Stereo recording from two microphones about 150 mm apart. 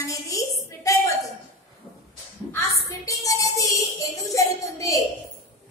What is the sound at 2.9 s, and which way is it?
Music, 20° left (ahead or behind).